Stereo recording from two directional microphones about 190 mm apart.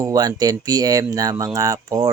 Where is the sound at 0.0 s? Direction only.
20° right (ahead or behind).